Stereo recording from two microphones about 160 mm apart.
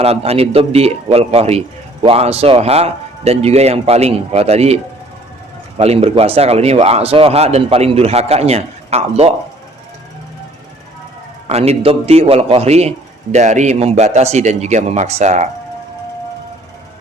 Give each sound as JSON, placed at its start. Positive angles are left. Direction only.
{"t": 0.0, "sound": "speech", "side_deg": -40}
{"t": 11.4, "sound": "a man's voice", "side_deg": -40}